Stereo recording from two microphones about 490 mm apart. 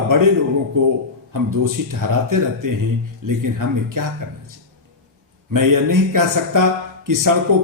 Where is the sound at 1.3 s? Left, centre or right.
Right.